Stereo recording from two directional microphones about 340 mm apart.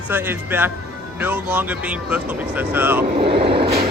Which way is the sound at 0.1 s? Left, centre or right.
Centre.